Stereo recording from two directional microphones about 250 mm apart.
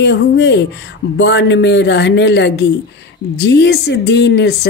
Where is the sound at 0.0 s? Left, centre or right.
Left.